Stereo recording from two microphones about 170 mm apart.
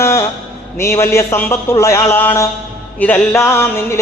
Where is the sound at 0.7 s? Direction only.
15° left (ahead or behind).